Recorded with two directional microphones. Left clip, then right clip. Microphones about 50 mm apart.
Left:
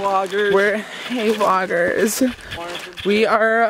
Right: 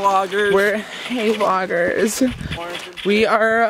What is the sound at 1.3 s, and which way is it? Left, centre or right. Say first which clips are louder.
Speech: left 1 dB; left.